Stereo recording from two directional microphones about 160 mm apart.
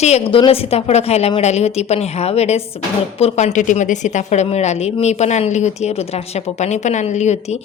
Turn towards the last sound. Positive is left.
turn(degrees=45)  # may be behind; listen again after turning